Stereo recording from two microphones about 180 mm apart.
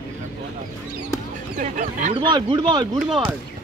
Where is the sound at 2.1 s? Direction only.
25° right (ahead or behind).